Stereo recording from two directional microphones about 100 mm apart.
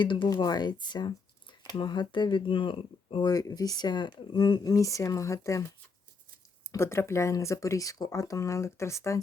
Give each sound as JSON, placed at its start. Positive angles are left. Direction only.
{"t": 0.0, "sound": "speech", "side_deg": 55}
{"t": 0.4, "sound": "speech", "side_deg": 45}
{"t": 3.2, "sound": "speech", "side_deg": 40}
{"t": 6.7, "sound": "speech", "side_deg": 25}